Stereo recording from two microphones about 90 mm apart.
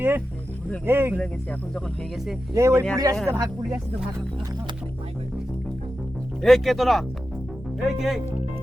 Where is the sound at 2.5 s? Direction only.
35° right (ahead or behind).